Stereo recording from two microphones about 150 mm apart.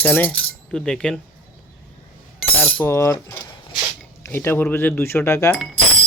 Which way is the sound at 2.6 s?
10° left (ahead or behind).